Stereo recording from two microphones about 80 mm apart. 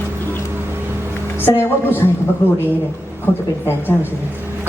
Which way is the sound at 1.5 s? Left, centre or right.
Left.